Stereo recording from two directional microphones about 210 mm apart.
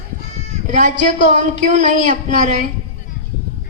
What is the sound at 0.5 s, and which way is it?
Bleat, 35° right (ahead or behind).